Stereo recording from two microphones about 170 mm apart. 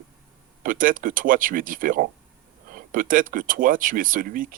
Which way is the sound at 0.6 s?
55° right (ahead or behind).